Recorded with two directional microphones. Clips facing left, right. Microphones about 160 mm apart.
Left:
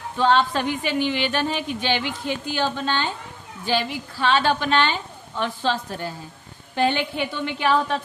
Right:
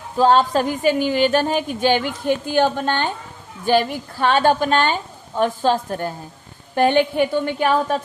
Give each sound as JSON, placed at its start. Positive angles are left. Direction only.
{"t": 0.2, "sound": "a woman's voice", "side_deg": -40}